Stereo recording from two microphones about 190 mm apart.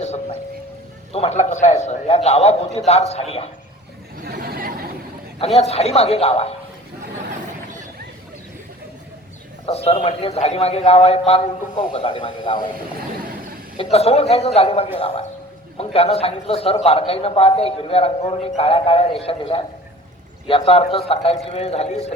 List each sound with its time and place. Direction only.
0.0 s a sound: 35° left (ahead or behind)
1.1 s a man's voice: 35° left (ahead or behind)
4.2 s a sound: 50° right (ahead or behind)
5.4 s a man's voice: 35° left (ahead or behind)
9.6 s a man's voice: 35° left (ahead or behind)
13.7 s a man's voice: 30° left (ahead or behind)